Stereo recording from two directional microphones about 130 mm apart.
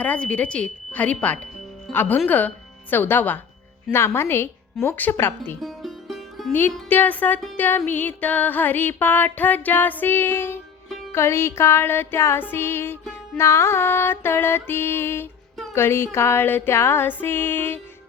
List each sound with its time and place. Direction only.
0.0 s music: 10° left (ahead or behind)
5.5 s music: centre (ahead or behind)
6.5 s music: 15° left (ahead or behind)
7.5 s a sound: 15° left (ahead or behind)
7.9 s music: 15° left (ahead or behind)